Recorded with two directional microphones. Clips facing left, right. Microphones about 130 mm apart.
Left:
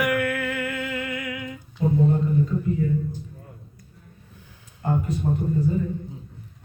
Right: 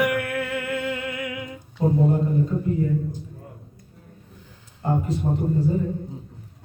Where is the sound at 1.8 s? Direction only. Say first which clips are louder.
Right 2 dB; 35° right (ahead or behind).